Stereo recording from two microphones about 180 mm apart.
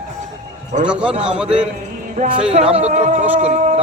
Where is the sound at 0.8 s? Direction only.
5° right (ahead or behind).